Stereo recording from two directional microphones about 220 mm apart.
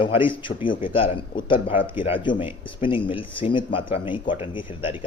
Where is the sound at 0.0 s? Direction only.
25° left (ahead or behind).